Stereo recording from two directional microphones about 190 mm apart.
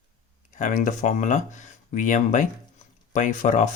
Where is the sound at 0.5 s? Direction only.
40° left (ahead or behind).